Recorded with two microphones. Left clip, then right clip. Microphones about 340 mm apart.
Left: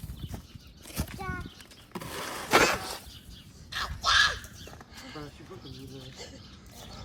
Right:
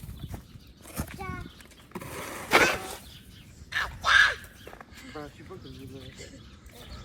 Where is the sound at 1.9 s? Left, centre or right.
Centre.